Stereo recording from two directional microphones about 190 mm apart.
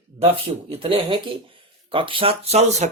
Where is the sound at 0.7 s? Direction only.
30° right (ahead or behind).